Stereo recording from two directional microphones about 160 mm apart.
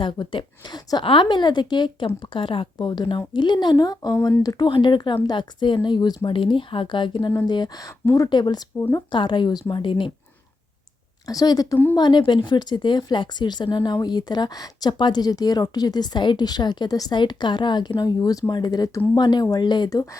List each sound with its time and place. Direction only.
0.0 s speech: 30° left (ahead or behind)
11.3 s speech: 20° left (ahead or behind)